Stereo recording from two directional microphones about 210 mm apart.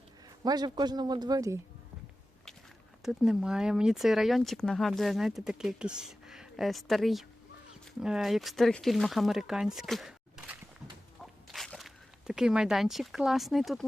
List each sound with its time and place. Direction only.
0.4 s a man's voice: 20° right (ahead or behind)
3.0 s speech: 5° right (ahead or behind)
11.5 s speech: centre (ahead or behind)